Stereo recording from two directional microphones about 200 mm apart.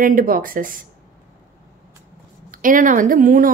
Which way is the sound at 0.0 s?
45° right (ahead or behind).